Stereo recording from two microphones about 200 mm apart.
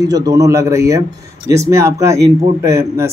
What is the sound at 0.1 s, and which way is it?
Speech, 15° right (ahead or behind).